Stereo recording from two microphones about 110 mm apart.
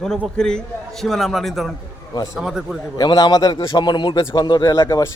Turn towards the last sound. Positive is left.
turn(degrees=35)  # may be behind; listen again after turning